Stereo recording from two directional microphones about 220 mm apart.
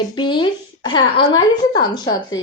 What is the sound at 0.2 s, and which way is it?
Speech, 20° left (ahead or behind).